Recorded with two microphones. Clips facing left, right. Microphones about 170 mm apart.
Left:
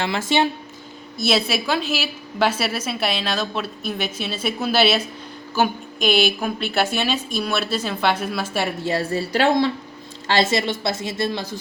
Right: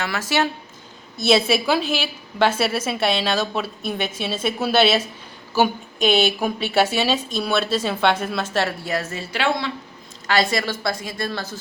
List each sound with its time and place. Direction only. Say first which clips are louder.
0.0 s a woman's voice: left 2 dB; 25° left (ahead or behind)
1.3 s a woman's voice: right 4 dB; centre (ahead or behind)
6.4 s speech: right 2 dB; 10° right (ahead or behind)
7.4 s a woman's voice: right 4 dB; 5° left (ahead or behind)
8.8 s a woman's voice: left 4 dB; 30° left (ahead or behind)
10.2 s a woman's voice: left 1 dB; 25° left (ahead or behind)